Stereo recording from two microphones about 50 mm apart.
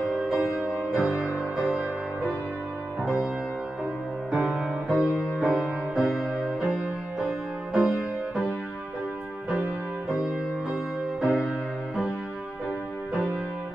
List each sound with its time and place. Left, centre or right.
0.0 s music: centre
4.3 s music: centre
10.0 s music: centre